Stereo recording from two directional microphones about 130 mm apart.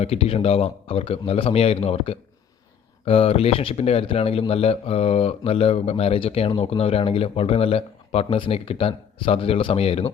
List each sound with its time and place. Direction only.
0.0 s speech: 50° left (ahead or behind)